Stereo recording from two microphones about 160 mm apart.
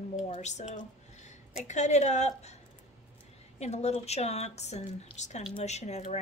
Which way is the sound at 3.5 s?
45° left (ahead or behind).